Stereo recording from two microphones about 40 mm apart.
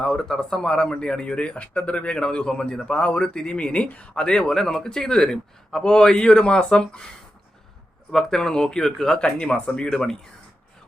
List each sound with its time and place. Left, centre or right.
0.0 s a man's voice: centre
3.0 s speech: left
4.1 s a man's voice: centre
8.1 s a man's voice: centre
9.1 s a man's voice: left